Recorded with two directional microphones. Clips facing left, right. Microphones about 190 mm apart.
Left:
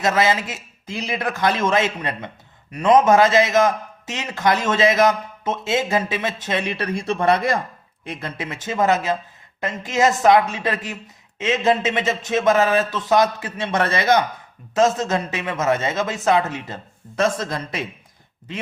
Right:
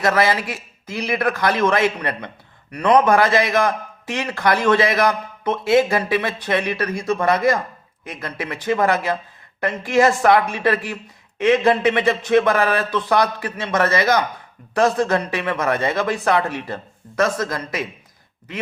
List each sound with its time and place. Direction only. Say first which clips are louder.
0.0 s a man's voice: right 1 dB; 25° left (ahead or behind)